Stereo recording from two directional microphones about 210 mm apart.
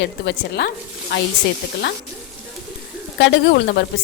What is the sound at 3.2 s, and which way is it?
Speech, 55° left (ahead or behind).